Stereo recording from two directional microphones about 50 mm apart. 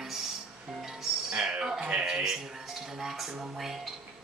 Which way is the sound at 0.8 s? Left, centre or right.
Centre.